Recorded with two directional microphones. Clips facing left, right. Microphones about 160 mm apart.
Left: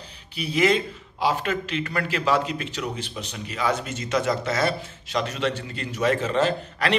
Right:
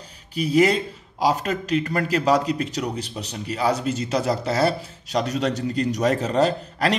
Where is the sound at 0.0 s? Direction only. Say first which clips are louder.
Right 6 dB; 40° right (ahead or behind).